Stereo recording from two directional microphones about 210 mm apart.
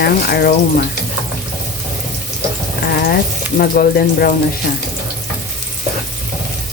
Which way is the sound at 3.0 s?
45° left (ahead or behind).